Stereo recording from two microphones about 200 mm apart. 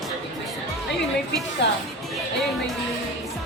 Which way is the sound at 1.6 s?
60° left (ahead or behind).